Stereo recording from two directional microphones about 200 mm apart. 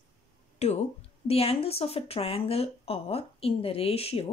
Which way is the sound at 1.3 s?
30° left (ahead or behind).